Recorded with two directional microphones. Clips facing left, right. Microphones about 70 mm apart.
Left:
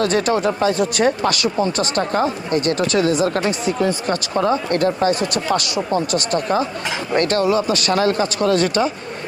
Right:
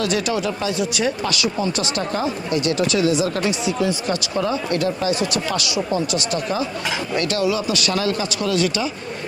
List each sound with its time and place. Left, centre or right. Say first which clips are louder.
0.0 s speech: left 4 dB; left